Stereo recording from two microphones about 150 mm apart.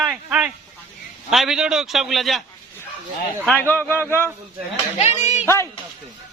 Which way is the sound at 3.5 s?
10° left (ahead or behind).